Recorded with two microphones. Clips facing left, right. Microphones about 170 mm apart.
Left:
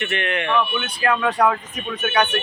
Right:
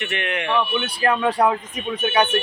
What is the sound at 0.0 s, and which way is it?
Speech, 15° right (ahead or behind).